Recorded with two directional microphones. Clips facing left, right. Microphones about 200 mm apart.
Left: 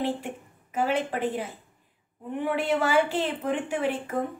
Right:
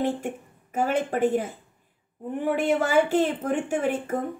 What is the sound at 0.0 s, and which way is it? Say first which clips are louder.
A woman's voice: right 3 dB; 50° right (ahead or behind).